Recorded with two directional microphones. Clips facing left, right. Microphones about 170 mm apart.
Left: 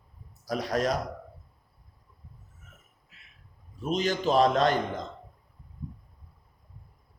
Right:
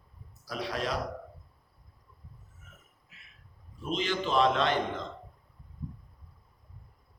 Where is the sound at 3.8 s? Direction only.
40° left (ahead or behind).